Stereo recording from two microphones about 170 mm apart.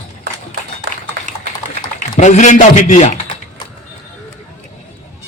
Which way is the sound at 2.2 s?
45° left (ahead or behind).